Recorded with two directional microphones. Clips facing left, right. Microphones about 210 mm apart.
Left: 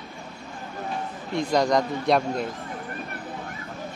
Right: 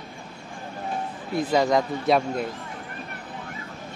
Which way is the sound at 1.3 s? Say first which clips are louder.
Right 1 dB; 5° right (ahead or behind).